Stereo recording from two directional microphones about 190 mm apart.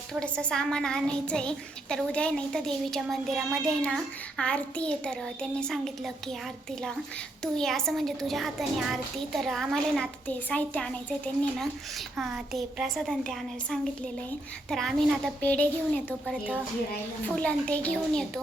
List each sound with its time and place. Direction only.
0.1 s speech: 5° left (ahead or behind)
7.4 s speech: centre (ahead or behind)
17.3 s speech: 5° left (ahead or behind)